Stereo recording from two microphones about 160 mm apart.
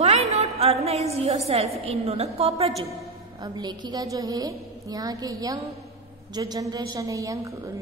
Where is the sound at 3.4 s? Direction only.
25° right (ahead or behind).